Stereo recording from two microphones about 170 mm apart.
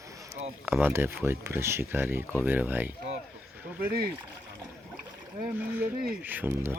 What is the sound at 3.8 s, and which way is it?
Speech, 60° right (ahead or behind).